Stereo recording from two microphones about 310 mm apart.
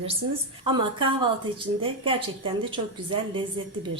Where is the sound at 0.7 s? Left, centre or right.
Centre.